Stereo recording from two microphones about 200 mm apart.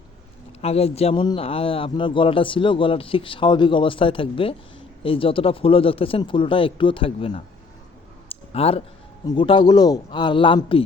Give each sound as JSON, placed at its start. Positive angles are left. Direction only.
{"t": 0.6, "sound": "a man's voice", "side_deg": 30}
{"t": 8.3, "sound": "a sound", "side_deg": 30}
{"t": 9.2, "sound": "a man's voice", "side_deg": 25}